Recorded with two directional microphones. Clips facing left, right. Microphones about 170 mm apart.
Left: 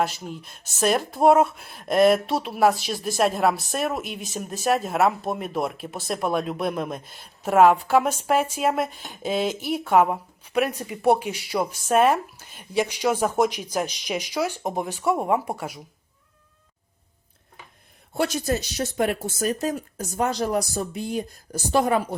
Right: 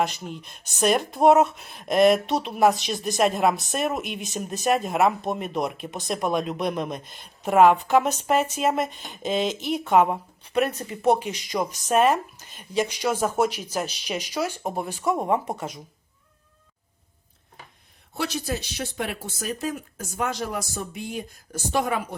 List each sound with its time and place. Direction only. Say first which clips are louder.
0.0 s speech: even; centre (ahead or behind)
18.1 s speech: left 4 dB; 50° left (ahead or behind)